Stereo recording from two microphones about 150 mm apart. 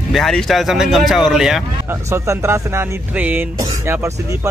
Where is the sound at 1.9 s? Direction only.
20° right (ahead or behind).